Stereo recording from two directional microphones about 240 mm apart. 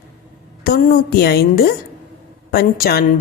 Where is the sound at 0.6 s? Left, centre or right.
Left.